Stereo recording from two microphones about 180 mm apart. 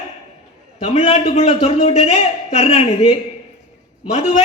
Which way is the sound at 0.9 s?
40° left (ahead or behind).